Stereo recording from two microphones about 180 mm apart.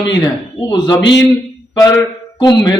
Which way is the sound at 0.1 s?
25° left (ahead or behind).